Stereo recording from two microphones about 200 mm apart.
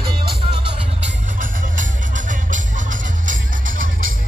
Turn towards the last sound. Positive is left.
turn(degrees=-45)  # may be behind; listen again after turning